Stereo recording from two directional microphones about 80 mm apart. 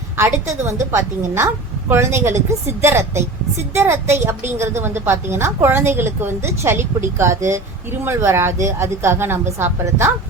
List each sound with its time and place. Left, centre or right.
0.2 s a woman's voice: right